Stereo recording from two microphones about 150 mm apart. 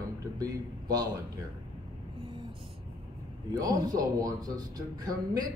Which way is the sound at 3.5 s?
25° right (ahead or behind).